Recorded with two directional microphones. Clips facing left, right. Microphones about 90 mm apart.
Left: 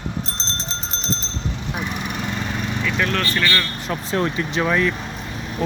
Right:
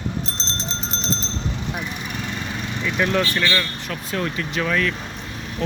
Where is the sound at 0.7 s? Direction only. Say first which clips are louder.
Right 2 dB; 25° right (ahead or behind).